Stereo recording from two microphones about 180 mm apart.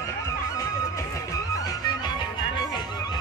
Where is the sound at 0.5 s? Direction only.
15° left (ahead or behind).